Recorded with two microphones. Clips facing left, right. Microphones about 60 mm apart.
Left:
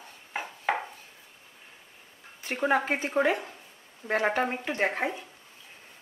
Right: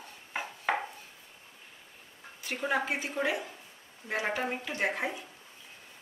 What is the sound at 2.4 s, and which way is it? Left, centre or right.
Speech, left.